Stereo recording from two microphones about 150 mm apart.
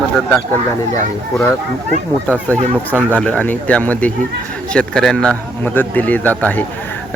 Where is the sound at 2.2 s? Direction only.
10° left (ahead or behind).